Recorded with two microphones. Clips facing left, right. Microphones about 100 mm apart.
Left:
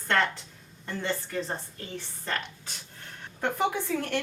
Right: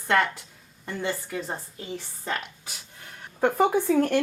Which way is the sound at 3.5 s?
40° right (ahead or behind).